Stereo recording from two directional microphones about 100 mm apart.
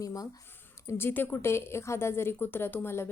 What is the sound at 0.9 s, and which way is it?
A woman's voice, 25° left (ahead or behind).